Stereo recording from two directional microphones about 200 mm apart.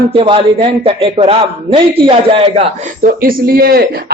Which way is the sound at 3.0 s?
45° right (ahead or behind).